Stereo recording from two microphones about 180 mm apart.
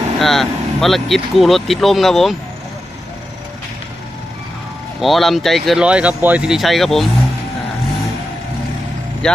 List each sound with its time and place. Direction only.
0.2 s speech: centre (ahead or behind)
4.9 s speech: centre (ahead or behind)
9.2 s speech: 5° left (ahead or behind)